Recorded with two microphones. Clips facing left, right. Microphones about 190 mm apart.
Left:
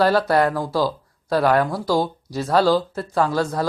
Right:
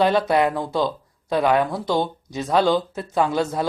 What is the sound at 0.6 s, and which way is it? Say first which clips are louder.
Speech: left 1 dB; 5° left (ahead or behind).